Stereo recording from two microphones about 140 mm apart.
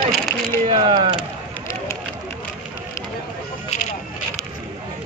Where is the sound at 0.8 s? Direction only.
35° right (ahead or behind).